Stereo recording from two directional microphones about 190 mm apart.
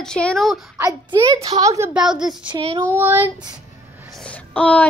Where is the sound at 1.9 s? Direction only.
5° right (ahead or behind).